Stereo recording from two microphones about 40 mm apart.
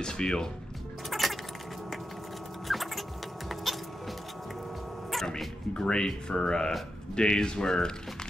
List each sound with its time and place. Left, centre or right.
0.0 s speech: centre
1.1 s a sound: centre
2.7 s music: centre
5.8 s speech: centre